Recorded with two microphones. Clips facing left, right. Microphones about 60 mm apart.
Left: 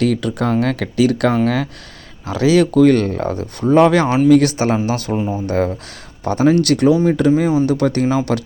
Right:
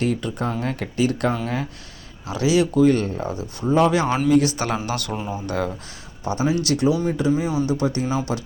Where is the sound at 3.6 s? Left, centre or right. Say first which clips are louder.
Left 6 dB; left.